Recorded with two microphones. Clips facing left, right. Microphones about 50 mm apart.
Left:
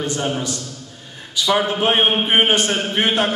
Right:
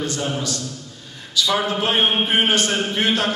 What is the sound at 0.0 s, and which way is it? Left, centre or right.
A man's voice, left.